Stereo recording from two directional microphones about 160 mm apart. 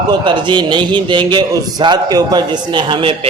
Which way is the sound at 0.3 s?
30° right (ahead or behind).